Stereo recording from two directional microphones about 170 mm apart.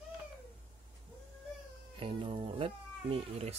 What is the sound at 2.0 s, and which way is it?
Speech, 30° right (ahead or behind).